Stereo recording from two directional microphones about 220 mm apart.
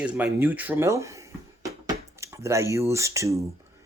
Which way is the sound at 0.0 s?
5° right (ahead or behind).